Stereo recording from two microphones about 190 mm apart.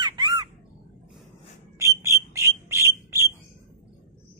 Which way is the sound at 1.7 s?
15° right (ahead or behind).